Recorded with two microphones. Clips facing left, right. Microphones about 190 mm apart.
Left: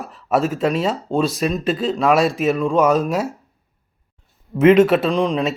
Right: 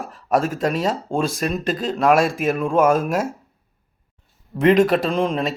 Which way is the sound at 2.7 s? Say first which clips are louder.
Right 2 dB; 50° right (ahead or behind).